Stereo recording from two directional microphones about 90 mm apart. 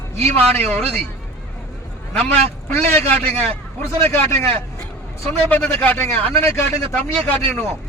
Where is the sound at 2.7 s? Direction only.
25° left (ahead or behind).